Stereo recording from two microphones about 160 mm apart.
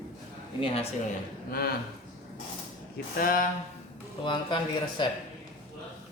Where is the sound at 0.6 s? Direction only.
35° left (ahead or behind).